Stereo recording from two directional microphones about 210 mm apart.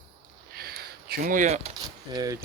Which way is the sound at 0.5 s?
45° right (ahead or behind).